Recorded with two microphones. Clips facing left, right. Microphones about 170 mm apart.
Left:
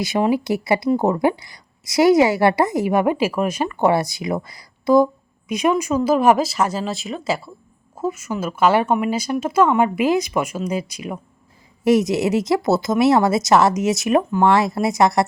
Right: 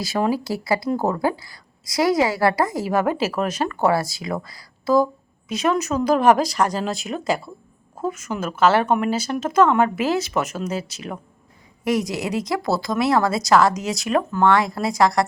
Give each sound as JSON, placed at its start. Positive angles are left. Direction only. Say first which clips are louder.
{"t": 0.0, "sound": "a woman's voice", "louder": "left 3 dB", "side_deg": 20}
{"t": 11.9, "sound": "a woman's voice", "louder": "left 6 dB", "side_deg": 25}